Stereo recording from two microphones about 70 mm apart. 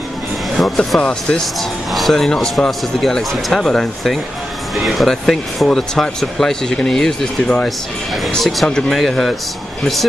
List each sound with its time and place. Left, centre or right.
0.6 s speech: centre